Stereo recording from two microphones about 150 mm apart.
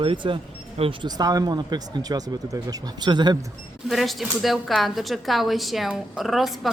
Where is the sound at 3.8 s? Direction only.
Centre (ahead or behind).